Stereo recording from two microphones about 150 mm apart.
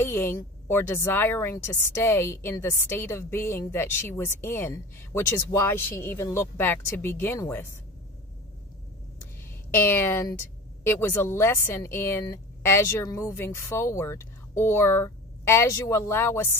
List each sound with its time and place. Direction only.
0.0 s speech: 15° left (ahead or behind)
9.2 s a sound: 15° left (ahead or behind)
10.9 s speech: 15° left (ahead or behind)